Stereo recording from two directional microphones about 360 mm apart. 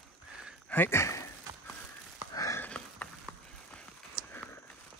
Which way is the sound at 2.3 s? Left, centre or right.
Centre.